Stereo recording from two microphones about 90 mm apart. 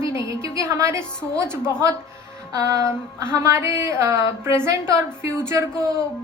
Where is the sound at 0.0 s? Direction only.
35° right (ahead or behind).